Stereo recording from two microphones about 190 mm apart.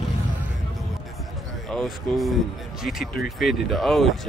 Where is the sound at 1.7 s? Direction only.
Centre (ahead or behind).